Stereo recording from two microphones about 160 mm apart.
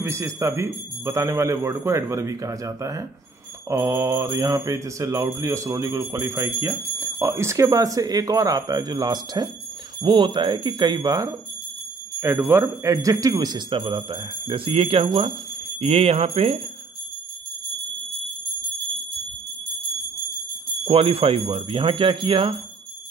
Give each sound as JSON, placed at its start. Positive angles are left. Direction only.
{"t": 0.0, "sound": "speech", "side_deg": -15}
{"t": 3.6, "sound": "mantra", "side_deg": -20}
{"t": 15.8, "sound": "speech", "side_deg": -40}
{"t": 20.8, "sound": "speech", "side_deg": -35}